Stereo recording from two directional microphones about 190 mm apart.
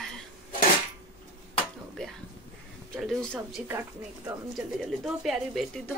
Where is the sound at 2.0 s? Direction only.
5° left (ahead or behind).